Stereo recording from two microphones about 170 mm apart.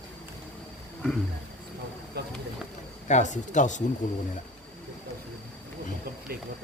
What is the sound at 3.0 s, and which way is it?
Speech, 45° left (ahead or behind).